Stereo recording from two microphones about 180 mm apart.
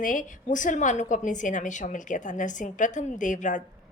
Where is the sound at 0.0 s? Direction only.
45° left (ahead or behind).